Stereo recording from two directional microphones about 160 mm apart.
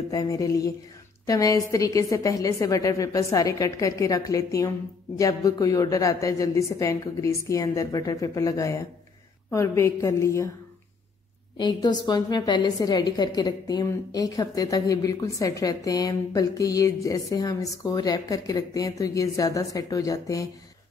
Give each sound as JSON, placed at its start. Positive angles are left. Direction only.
{"t": 0.1, "sound": "a woman's voice", "side_deg": 20}
{"t": 11.5, "sound": "a woman's voice", "side_deg": 25}